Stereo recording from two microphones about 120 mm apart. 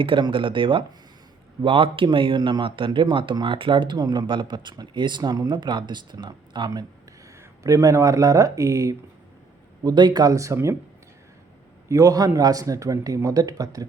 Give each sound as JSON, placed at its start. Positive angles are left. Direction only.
{"t": 0.0, "sound": "a man's voice", "side_deg": -45}
{"t": 7.3, "sound": "a man's voice", "side_deg": -25}
{"t": 11.9, "sound": "a man's voice", "side_deg": -25}